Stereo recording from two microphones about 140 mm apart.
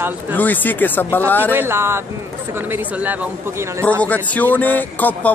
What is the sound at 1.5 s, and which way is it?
Speech, 15° right (ahead or behind).